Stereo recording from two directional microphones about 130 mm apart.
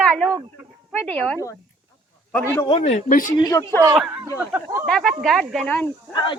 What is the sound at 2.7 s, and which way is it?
Speech, 55° left (ahead or behind).